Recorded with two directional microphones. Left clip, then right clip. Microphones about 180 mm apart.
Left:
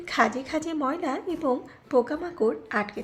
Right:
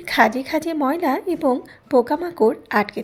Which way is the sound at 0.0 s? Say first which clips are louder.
Right 7 dB; 30° right (ahead or behind).